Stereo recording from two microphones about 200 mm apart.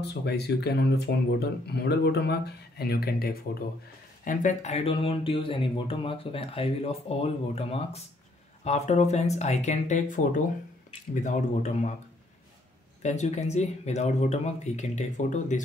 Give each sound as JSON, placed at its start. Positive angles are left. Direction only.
{"t": 0.0, "sound": "speech", "side_deg": 55}
{"t": 13.0, "sound": "speech", "side_deg": 35}